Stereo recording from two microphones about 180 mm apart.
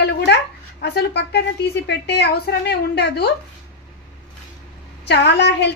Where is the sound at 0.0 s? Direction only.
70° left (ahead or behind).